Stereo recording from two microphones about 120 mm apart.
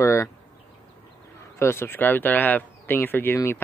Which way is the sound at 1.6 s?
20° left (ahead or behind).